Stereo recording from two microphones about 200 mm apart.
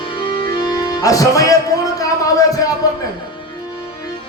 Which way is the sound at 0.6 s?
20° left (ahead or behind).